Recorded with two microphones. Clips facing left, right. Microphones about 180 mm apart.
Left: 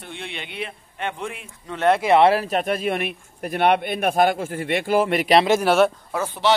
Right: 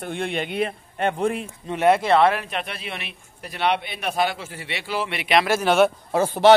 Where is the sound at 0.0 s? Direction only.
50° right (ahead or behind).